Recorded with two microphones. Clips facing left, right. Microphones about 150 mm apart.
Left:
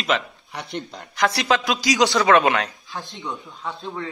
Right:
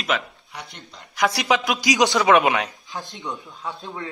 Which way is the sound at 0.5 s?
70° left (ahead or behind).